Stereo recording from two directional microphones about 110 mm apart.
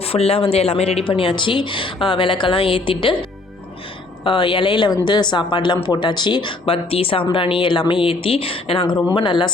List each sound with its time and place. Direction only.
0.0 s a woman's voice: 65° left (ahead or behind); by 9.5 s 45° left (ahead or behind)